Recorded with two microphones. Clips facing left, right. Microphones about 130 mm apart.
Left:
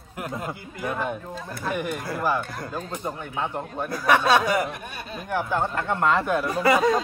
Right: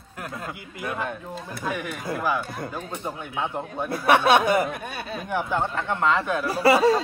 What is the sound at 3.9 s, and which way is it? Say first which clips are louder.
Speech: right 1 dB; 25° right (ahead or behind).